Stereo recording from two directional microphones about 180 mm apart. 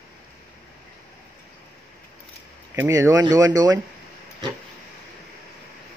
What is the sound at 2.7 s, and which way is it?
Speech, 15° right (ahead or behind).